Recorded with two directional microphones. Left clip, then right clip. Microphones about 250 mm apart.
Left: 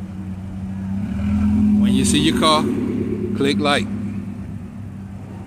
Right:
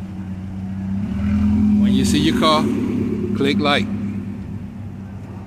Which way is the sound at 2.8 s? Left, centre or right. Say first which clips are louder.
Right 1 dB; right.